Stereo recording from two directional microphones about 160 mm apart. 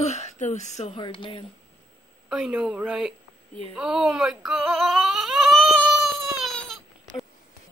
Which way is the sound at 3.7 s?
5° right (ahead or behind).